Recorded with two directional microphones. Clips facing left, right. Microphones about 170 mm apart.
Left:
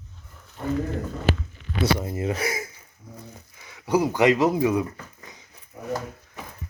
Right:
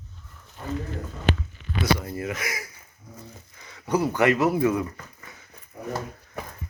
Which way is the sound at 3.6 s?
10° left (ahead or behind).